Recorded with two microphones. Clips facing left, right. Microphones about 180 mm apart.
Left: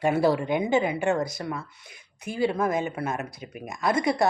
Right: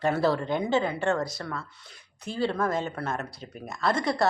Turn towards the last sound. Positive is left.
turn(degrees=15)  # may be behind; listen again after turning